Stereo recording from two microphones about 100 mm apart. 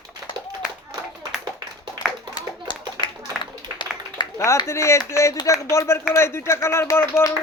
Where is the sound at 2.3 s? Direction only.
55° left (ahead or behind).